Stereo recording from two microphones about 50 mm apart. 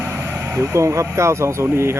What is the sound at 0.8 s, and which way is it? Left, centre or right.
Speech, right.